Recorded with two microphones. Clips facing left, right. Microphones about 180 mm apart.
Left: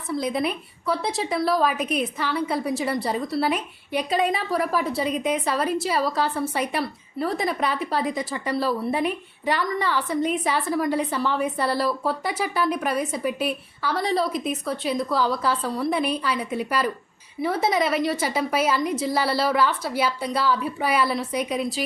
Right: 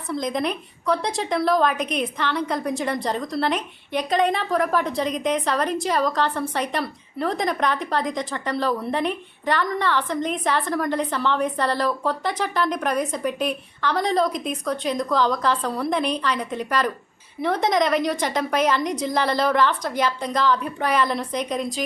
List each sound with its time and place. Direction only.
0.1 s a woman's voice: 5° left (ahead or behind)